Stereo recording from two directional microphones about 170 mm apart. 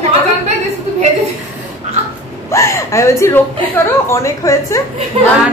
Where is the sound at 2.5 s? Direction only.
15° left (ahead or behind).